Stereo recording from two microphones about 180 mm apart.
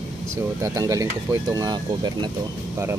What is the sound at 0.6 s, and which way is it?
Speech, 20° right (ahead or behind).